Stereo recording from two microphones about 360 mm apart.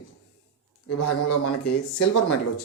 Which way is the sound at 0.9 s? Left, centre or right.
Left.